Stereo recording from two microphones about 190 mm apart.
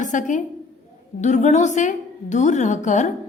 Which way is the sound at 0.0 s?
40° left (ahead or behind).